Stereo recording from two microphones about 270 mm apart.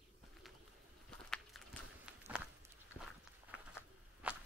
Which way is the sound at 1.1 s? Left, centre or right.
Centre.